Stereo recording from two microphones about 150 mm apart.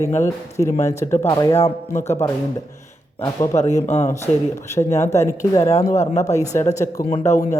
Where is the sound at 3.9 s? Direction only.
45° left (ahead or behind).